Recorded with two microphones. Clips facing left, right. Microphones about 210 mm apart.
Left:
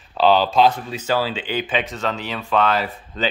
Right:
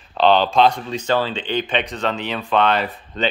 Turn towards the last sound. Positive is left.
turn(degrees=0)  # may be behind; listen again after turning